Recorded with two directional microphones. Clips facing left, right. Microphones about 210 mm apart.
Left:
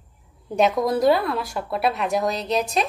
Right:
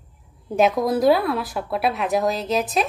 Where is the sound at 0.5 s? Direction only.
Centre (ahead or behind).